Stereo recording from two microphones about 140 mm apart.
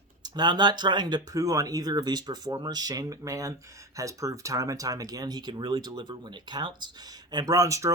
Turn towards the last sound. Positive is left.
turn(degrees=-25)  # may be behind; listen again after turning